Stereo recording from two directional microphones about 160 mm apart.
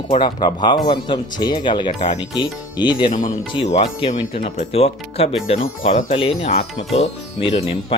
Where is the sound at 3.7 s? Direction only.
45° left (ahead or behind).